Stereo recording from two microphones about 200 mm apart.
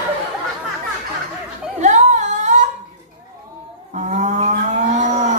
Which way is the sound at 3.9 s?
35° right (ahead or behind).